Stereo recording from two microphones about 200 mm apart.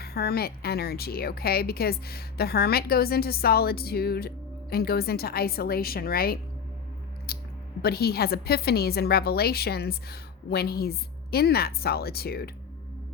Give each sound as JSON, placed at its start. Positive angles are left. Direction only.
{"t": 0.0, "sound": "a woman's voice", "side_deg": 50}
{"t": 7.3, "sound": "a sound", "side_deg": 50}
{"t": 7.8, "sound": "a woman's voice", "side_deg": 50}